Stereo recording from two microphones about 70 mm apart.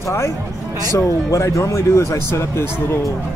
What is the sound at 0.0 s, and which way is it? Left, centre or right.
Speech, left.